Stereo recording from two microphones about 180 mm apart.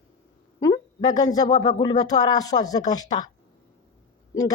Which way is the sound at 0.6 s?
20° left (ahead or behind).